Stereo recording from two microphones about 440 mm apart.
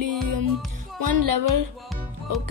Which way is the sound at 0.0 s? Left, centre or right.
Right.